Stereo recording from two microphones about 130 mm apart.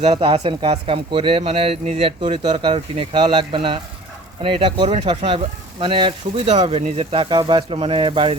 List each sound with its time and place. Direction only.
0.0 s speech: 50° right (ahead or behind)